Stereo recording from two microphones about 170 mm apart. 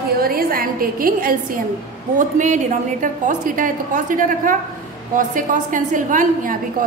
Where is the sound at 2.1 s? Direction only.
45° right (ahead or behind).